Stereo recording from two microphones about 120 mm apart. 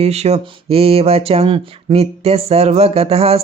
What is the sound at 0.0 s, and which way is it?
Speech, 60° right (ahead or behind).